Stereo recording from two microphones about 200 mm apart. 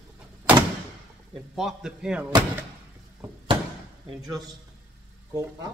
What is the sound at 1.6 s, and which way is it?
Speech, 5° right (ahead or behind).